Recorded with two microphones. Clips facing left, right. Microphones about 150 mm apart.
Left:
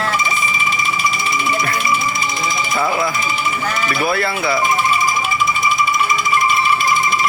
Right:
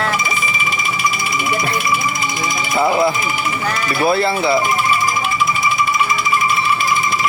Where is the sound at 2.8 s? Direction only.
25° right (ahead or behind).